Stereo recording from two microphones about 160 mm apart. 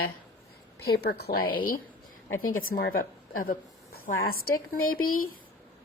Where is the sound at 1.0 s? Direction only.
90° left.